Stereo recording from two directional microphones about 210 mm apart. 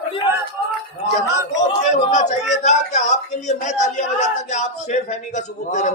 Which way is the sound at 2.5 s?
35° left (ahead or behind).